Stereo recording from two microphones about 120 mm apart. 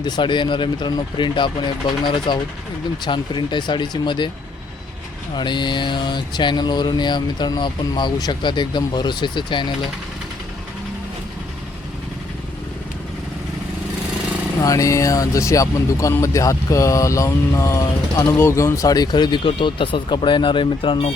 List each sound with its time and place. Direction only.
0.0 s mantra: 40° left (ahead or behind)
5.4 s mantra: 40° left (ahead or behind)
14.6 s speech: 30° left (ahead or behind); by 21.1 s 45° left (ahead or behind)